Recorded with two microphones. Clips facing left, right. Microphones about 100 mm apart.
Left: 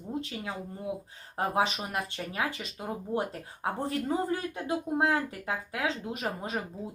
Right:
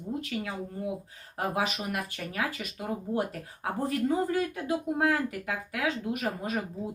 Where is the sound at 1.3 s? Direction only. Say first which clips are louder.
Left 2 dB; 30° left (ahead or behind).